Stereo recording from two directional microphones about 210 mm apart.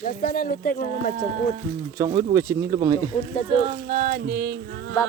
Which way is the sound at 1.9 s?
15° right (ahead or behind).